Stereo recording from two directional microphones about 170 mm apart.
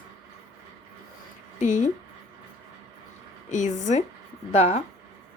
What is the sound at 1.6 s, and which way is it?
Speech, 45° left (ahead or behind).